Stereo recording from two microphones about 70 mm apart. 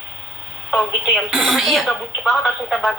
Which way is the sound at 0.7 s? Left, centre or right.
Centre.